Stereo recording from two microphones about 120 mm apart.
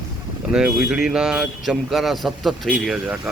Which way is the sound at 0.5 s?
10° right (ahead or behind).